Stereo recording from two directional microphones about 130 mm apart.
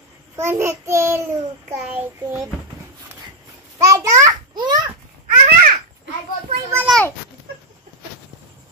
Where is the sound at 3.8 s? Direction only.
25° right (ahead or behind).